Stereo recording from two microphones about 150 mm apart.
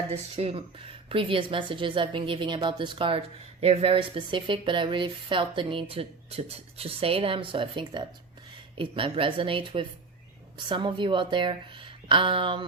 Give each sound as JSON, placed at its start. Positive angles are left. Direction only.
{"t": 0.1, "sound": "speech", "side_deg": -40}